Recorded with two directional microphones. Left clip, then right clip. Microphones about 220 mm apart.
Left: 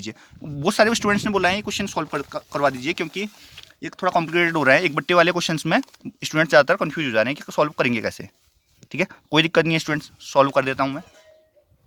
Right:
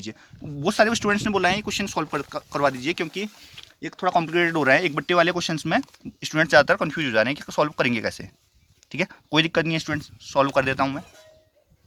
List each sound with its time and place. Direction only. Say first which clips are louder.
0.6 s speech: left 2 dB; 30° left (ahead or behind)
10.5 s speech: left 1 dB; 10° left (ahead or behind)